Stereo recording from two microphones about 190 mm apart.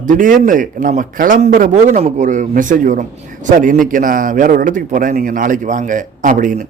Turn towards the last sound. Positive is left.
turn(degrees=-45)  # may be behind; listen again after turning